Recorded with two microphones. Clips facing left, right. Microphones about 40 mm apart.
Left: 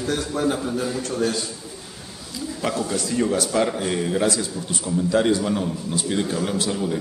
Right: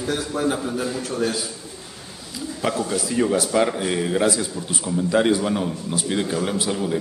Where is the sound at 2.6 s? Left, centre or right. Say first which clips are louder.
Right 1 dB; centre.